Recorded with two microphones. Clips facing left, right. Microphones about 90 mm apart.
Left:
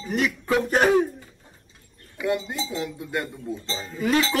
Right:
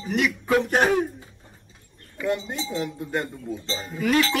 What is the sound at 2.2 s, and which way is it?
Speech, 5° left (ahead or behind).